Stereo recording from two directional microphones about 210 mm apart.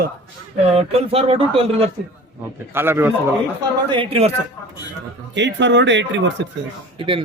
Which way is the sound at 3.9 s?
25° right (ahead or behind).